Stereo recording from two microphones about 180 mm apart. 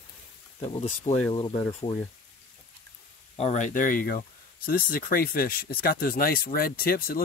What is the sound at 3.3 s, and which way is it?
Speech, 35° left (ahead or behind).